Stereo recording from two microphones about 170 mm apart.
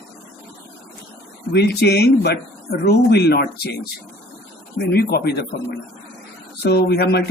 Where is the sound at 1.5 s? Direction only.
75° left (ahead or behind).